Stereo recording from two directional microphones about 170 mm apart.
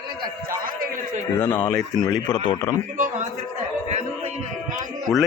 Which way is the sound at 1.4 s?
25° left (ahead or behind).